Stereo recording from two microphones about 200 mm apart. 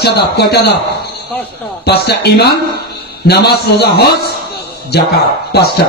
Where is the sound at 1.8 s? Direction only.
55° left (ahead or behind).